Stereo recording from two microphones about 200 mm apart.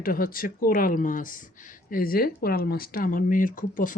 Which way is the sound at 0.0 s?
45° left (ahead or behind).